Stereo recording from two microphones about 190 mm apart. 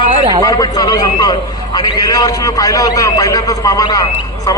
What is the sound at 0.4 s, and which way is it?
A man's voice, 20° left (ahead or behind).